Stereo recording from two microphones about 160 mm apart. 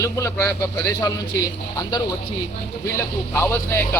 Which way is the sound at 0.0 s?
20° left (ahead or behind).